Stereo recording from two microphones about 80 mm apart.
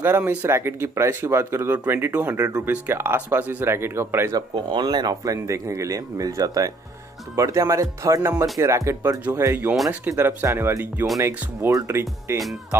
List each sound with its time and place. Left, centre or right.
0.0 s speech: right
0.5 s speech: right
4.3 s speech: right
4.6 s speech: right